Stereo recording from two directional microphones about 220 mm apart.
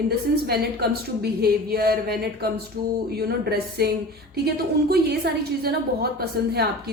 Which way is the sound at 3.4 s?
45° right (ahead or behind).